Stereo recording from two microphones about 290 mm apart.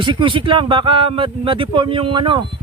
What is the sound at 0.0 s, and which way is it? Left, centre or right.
Speech, centre.